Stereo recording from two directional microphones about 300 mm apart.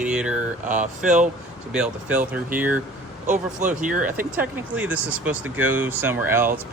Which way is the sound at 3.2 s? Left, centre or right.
Right.